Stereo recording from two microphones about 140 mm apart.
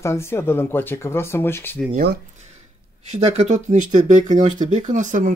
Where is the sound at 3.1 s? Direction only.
55° right (ahead or behind).